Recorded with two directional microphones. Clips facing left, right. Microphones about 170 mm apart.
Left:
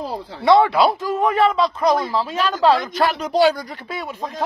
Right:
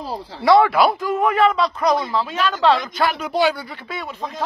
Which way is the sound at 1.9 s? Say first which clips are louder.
Left 1 dB; 5° left (ahead or behind).